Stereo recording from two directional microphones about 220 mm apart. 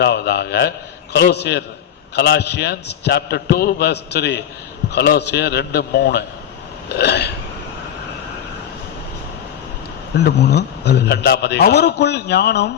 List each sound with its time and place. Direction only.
0.0 s a man's voice: 50° left (ahead or behind)
10.2 s a man's voice: 50° left (ahead or behind)